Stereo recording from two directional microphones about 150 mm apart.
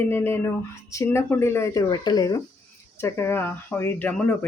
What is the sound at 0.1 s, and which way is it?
Speech, 15° left (ahead or behind).